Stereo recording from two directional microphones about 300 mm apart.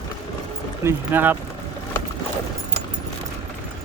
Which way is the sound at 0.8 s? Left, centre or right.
Centre.